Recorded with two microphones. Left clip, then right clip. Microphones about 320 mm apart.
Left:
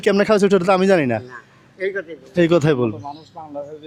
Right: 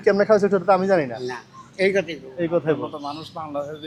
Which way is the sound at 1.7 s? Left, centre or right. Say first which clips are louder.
Right 4 dB; centre.